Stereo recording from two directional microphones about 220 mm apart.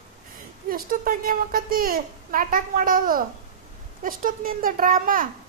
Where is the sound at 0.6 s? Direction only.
40° right (ahead or behind).